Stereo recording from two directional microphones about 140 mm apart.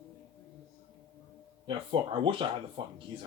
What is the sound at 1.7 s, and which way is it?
Speech, 35° right (ahead or behind).